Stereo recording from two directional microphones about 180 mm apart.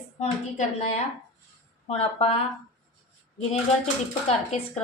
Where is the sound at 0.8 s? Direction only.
40° left (ahead or behind).